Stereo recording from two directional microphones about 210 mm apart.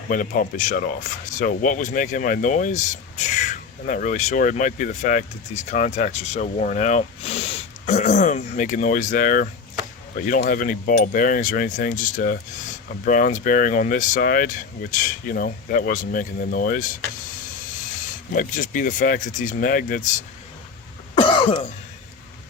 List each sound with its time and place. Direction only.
0.1 s speech: 40° left (ahead or behind)
18.3 s speech: 40° left (ahead or behind)
21.2 s cough: 25° left (ahead or behind)